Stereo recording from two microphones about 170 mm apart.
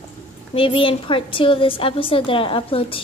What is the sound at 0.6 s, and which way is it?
A woman's voice, 30° left (ahead or behind).